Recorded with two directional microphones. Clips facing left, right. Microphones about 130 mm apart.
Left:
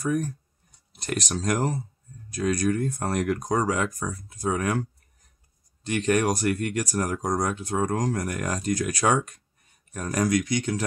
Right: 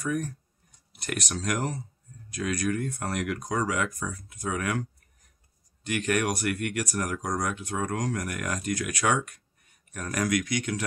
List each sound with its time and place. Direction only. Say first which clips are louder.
0.0 s speech: left 4 dB; 40° left (ahead or behind)
5.9 s speech: left 4 dB; 30° left (ahead or behind)